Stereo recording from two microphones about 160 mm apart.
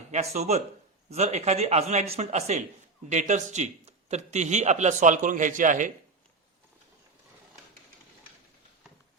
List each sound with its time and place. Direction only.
0.3 s a man's voice: 45° right (ahead or behind)